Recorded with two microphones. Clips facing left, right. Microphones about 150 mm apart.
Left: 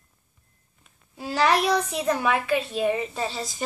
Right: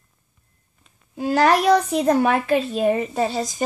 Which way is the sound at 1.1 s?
50° right (ahead or behind).